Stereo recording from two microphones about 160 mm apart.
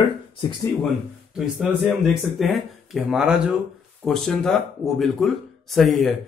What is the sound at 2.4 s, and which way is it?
Speech, centre (ahead or behind).